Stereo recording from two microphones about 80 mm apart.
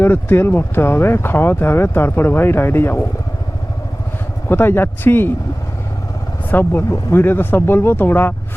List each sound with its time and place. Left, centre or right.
0.0 s speech: left
4.4 s speech: left
6.5 s speech: left